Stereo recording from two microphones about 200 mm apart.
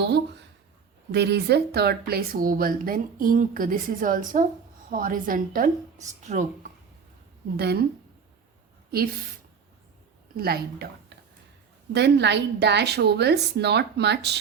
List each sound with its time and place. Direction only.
1.1 s a woman's voice: 55° right (ahead or behind); by 6.7 s 35° right (ahead or behind)
7.5 s speech: 55° right (ahead or behind)
10.3 s speech: 50° right (ahead or behind)
11.9 s a woman's voice: 60° right (ahead or behind)